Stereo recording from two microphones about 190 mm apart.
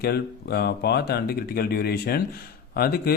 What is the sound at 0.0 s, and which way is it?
Speech, 55° left (ahead or behind).